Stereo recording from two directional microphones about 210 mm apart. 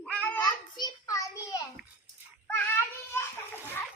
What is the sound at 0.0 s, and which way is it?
Child singing, 5° left (ahead or behind).